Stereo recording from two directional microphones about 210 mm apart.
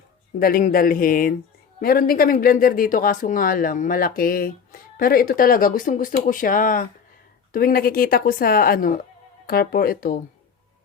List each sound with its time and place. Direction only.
0.3 s a woman's voice: 45° left (ahead or behind)